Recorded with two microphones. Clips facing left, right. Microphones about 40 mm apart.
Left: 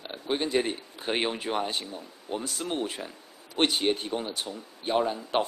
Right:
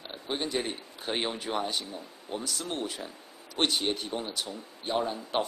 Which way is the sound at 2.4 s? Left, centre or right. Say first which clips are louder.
Left 3 dB; centre.